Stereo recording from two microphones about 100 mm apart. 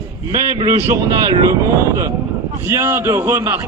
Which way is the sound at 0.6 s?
35° right (ahead or behind).